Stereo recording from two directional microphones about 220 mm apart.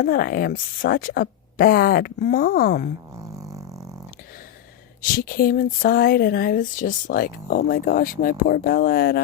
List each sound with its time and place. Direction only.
0.0 s speech: 40° left (ahead or behind)
5.1 s speech: 40° left (ahead or behind)